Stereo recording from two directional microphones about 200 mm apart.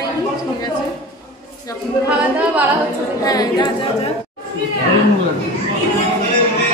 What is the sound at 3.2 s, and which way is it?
Speech, 20° left (ahead or behind).